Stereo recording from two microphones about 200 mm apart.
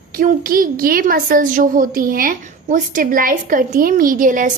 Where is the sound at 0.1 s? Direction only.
45° right (ahead or behind).